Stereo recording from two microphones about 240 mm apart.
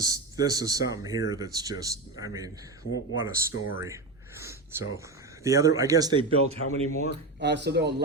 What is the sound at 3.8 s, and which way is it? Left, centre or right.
Speech, centre.